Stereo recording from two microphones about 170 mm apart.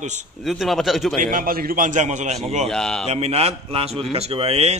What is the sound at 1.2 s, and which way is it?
Speech, 55° right (ahead or behind).